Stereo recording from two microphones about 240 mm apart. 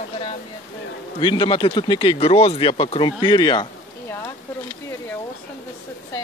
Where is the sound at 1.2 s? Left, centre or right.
Centre.